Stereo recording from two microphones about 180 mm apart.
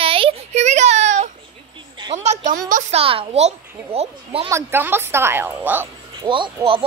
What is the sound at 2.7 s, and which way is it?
A child's voice, 35° right (ahead or behind).